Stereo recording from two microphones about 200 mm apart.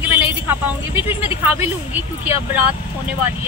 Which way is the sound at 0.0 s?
10° right (ahead or behind).